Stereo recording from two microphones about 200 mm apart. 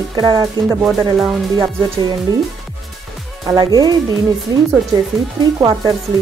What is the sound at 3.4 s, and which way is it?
Speech, 20° right (ahead or behind).